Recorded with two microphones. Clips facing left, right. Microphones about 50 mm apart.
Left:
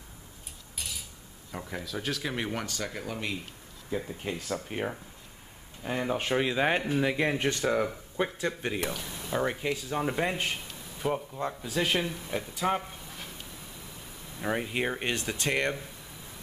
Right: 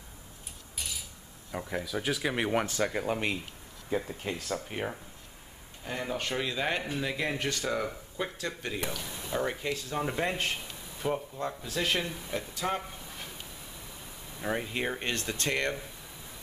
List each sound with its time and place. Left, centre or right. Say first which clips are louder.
0.7 s cutlery: even; centre
1.5 s speech: right 3 dB; centre; by 3.3 s right
4.0 s speech: left 1 dB; centre
5.9 s speech: left 4 dB; centre
8.8 s speech: left 2 dB; centre
9.4 s speech: left 2 dB; centre
12.4 s a sound: left 3 dB; centre